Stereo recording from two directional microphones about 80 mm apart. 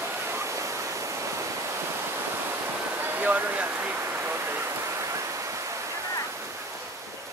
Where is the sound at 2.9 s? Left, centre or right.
Right.